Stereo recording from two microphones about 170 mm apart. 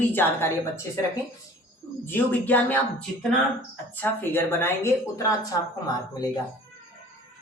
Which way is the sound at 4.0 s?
10° left (ahead or behind).